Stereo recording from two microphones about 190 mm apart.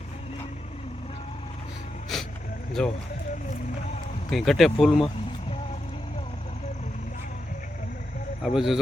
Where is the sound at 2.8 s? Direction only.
5° left (ahead or behind).